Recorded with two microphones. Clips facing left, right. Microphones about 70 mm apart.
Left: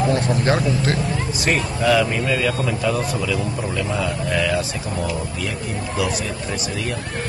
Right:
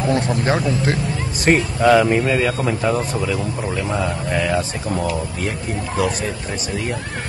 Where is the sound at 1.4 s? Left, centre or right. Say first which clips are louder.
Right 6 dB; right.